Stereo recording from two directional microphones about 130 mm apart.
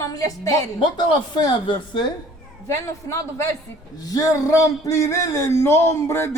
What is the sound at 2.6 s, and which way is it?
A woman's voice, 20° left (ahead or behind).